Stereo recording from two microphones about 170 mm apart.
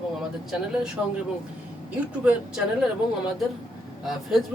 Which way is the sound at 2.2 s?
5° right (ahead or behind).